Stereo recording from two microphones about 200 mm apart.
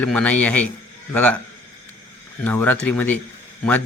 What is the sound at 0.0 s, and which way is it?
A man's voice, 5° left (ahead or behind).